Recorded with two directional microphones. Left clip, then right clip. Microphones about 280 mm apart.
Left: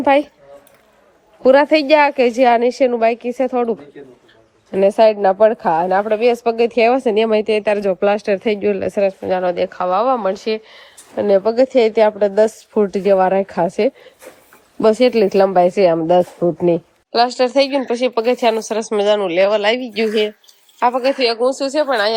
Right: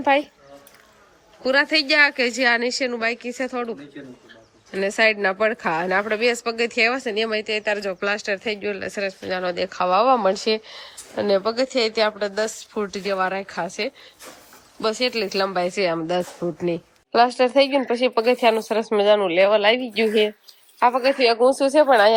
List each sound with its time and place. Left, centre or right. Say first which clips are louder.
0.0 s speech: left 5 dB; centre
1.5 s a woman's voice: left 8 dB; centre